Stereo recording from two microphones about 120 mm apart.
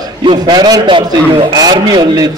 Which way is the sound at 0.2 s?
40° right (ahead or behind).